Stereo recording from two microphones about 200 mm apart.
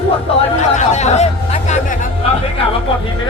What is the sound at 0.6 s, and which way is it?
Speech, 35° left (ahead or behind).